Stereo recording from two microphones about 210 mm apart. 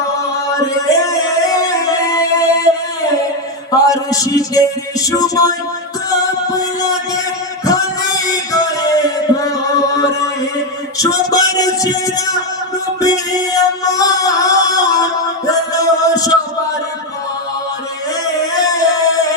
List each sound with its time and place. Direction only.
0.5 s music: 15° left (ahead or behind)
3.8 s music: 15° left (ahead or behind)
18.7 s music: 15° left (ahead or behind)